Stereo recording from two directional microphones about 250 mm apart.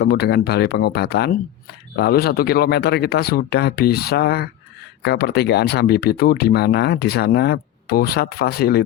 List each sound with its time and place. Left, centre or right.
0.0 s speech: left